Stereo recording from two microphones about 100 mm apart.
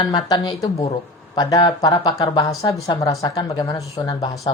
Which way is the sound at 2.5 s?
35° left (ahead or behind).